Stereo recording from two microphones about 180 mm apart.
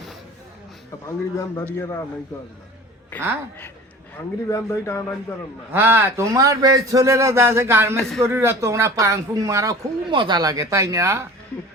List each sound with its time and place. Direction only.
1.0 s a man's voice: 15° left (ahead or behind)
3.1 s a man's voice: 10° left (ahead or behind)
4.4 s a man's voice: 15° left (ahead or behind)
5.7 s speech: 10° right (ahead or behind)